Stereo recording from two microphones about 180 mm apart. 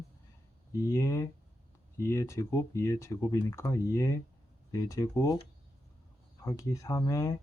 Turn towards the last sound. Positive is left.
turn(degrees=20)  # may be behind; listen again after turning